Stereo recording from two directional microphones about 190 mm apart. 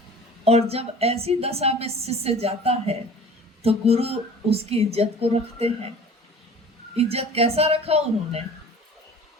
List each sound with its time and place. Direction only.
0.4 s a woman's voice: 35° right (ahead or behind)
6.9 s a woman's voice: 30° right (ahead or behind)